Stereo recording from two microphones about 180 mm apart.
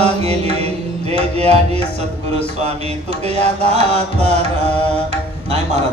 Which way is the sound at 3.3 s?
35° right (ahead or behind).